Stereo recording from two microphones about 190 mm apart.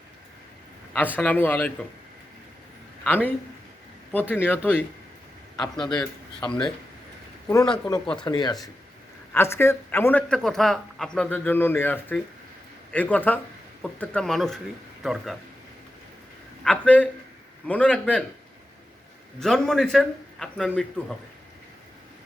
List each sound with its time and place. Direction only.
0.9 s speech: 10° left (ahead or behind)
3.0 s speech: 10° left (ahead or behind)
6.0 s speech: 5° left (ahead or behind)
7.4 s a man's voice: 15° left (ahead or behind); by 15.4 s centre (ahead or behind)
16.6 s speech: 10° left (ahead or behind)
19.4 s a man's voice: 5° left (ahead or behind)